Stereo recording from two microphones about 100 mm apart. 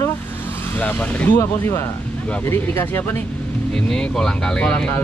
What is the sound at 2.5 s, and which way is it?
Speech, 20° left (ahead or behind).